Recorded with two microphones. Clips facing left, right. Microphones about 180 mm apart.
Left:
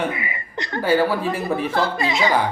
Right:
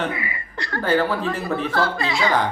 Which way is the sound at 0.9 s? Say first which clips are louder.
Left 2 dB; 10° left (ahead or behind).